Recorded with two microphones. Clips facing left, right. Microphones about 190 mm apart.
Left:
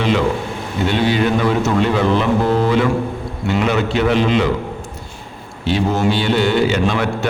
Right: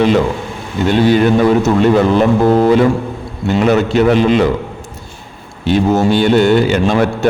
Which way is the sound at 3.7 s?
45° right (ahead or behind).